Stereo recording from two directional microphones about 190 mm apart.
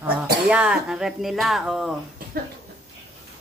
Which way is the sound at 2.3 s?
50° right (ahead or behind).